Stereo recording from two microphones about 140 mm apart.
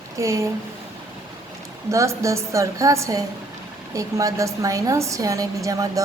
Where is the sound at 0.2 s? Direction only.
20° right (ahead or behind).